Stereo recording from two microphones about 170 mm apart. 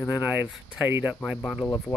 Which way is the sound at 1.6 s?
15° left (ahead or behind).